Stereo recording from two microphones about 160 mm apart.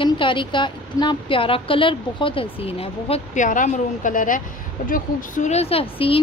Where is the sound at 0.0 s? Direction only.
30° left (ahead or behind).